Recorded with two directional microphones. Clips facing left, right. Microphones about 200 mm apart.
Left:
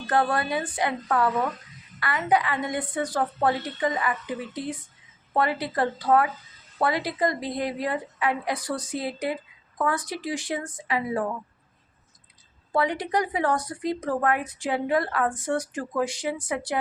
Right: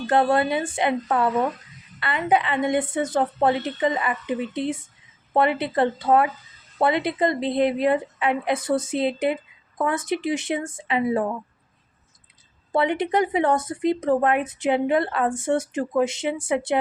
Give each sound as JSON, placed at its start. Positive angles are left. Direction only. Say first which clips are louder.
{"t": 0.1, "sound": "a woman's voice", "louder": "right 4 dB", "side_deg": -25}
{"t": 12.7, "sound": "a woman's voice", "louder": "right 4 dB", "side_deg": -25}